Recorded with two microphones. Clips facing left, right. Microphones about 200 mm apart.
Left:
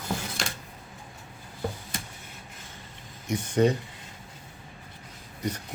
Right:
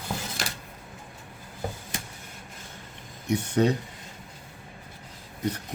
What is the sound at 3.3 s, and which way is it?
Speech, 65° right (ahead or behind).